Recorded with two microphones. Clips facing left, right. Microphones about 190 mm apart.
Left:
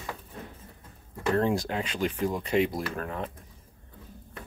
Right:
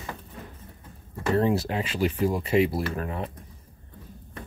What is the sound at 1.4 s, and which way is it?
Speech, 5° right (ahead or behind).